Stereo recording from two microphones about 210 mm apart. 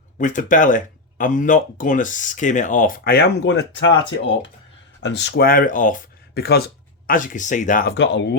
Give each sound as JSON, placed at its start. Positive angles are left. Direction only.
{"t": 0.2, "sound": "speech", "side_deg": 35}
{"t": 5.0, "sound": "speech", "side_deg": 55}
{"t": 7.9, "sound": "speech", "side_deg": 60}